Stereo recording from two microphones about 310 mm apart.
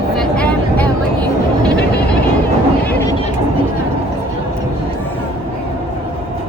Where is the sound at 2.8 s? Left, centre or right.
Centre.